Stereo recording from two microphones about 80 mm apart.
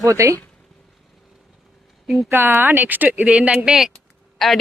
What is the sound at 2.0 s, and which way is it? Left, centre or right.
Speech, centre.